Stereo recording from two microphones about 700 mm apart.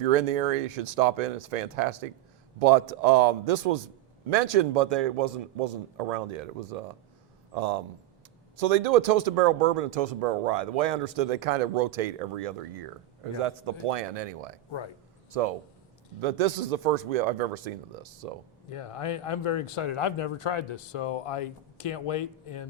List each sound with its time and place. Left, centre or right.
0.0 s speech: right
8.5 s speech: right
16.2 s speech: right
18.7 s speech: left